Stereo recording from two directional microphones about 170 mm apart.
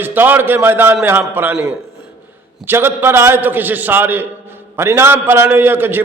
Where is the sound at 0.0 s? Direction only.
10° right (ahead or behind).